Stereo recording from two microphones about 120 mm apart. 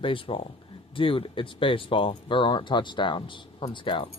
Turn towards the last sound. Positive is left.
turn(degrees=45)  # may be behind; listen again after turning